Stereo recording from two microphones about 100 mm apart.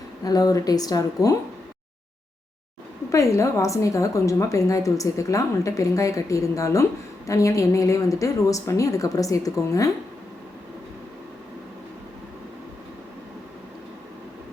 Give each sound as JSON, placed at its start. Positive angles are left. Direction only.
{"t": 0.3, "sound": "a woman's voice", "side_deg": 40}
{"t": 3.1, "sound": "a woman's voice", "side_deg": 30}